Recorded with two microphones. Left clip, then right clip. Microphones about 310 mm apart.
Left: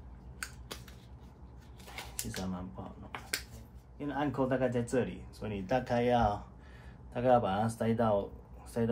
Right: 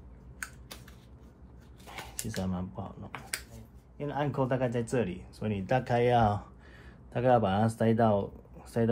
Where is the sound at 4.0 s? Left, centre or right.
Right.